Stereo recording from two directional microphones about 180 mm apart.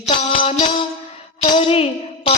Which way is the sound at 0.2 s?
35° left (ahead or behind).